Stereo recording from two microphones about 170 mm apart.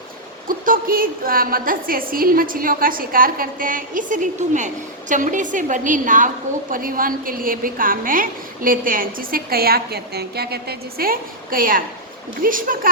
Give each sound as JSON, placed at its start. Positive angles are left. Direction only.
{"t": 0.4, "sound": "a woman's voice", "side_deg": -55}